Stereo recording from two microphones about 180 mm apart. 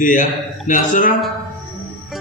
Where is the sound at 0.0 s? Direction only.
45° left (ahead or behind).